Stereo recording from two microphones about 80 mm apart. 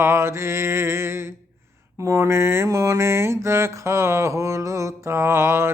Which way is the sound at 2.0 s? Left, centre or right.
Right.